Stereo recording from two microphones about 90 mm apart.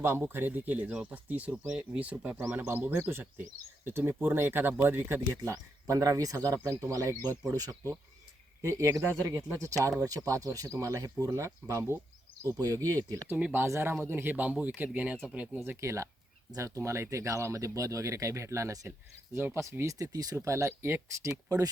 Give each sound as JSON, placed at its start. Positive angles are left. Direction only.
{"t": 0.0, "sound": "speech", "side_deg": -25}
{"t": 5.4, "sound": "speech", "side_deg": -35}
{"t": 13.2, "sound": "speech", "side_deg": -20}
{"t": 15.8, "sound": "speech", "side_deg": -35}
{"t": 18.9, "sound": "speech", "side_deg": -25}